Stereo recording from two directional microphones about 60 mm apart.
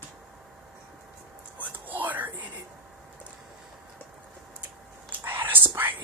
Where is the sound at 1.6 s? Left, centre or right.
Right.